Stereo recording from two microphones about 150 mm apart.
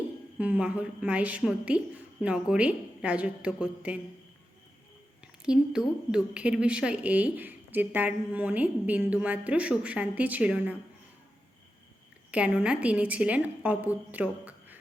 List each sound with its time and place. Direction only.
0.3 s a woman's voice: 10° right (ahead or behind)
5.2 s a woman's voice: 5° right (ahead or behind)
12.3 s a woman's voice: 5° right (ahead or behind)